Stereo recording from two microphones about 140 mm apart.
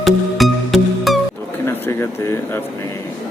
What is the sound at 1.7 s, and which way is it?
Speech, 15° left (ahead or behind).